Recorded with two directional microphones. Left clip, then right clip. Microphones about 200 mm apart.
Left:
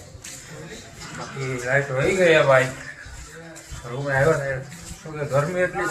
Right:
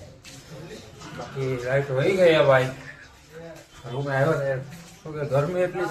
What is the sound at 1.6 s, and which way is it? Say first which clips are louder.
Speech: left 2 dB; 5° right (ahead or behind).